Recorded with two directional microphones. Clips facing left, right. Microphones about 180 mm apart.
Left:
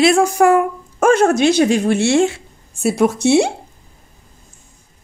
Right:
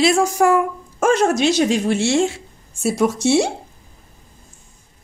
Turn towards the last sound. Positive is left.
turn(degrees=60)  # may be behind; listen again after turning